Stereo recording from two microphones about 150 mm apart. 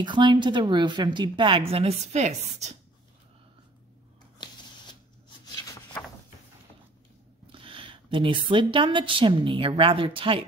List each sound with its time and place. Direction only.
0.0 s a woman's voice: 30° right (ahead or behind); by 2.8 s 50° right (ahead or behind)
5.4 s a sound: 25° left (ahead or behind)
7.5 s a woman's voice: 35° right (ahead or behind)